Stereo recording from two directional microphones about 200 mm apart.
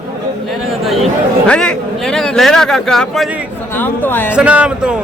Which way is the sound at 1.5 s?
5° left (ahead or behind).